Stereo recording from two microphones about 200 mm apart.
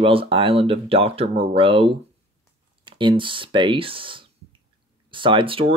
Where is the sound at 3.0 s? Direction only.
25° right (ahead or behind).